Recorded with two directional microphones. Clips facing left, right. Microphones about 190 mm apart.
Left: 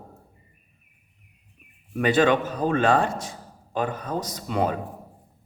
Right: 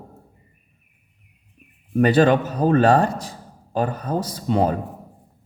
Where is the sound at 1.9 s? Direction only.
40° right (ahead or behind).